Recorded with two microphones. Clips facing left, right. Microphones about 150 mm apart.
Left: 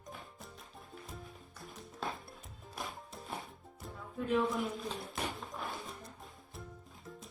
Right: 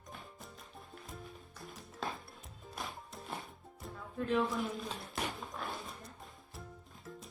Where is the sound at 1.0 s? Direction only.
Centre (ahead or behind).